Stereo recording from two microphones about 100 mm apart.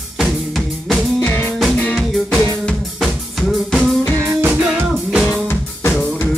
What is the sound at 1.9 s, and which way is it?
Music, centre (ahead or behind).